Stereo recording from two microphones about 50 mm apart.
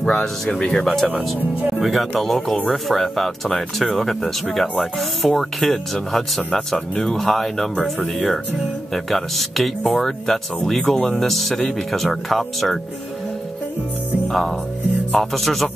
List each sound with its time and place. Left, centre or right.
0.5 s speech: left
1.8 s speech: centre
14.3 s speech: centre